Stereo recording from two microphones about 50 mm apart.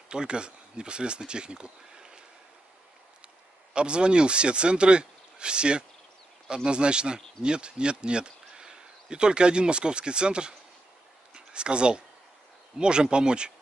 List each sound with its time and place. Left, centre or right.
0.1 s speech: centre
3.7 s speech: centre